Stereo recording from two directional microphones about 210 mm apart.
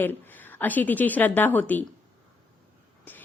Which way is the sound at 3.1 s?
10° left (ahead or behind).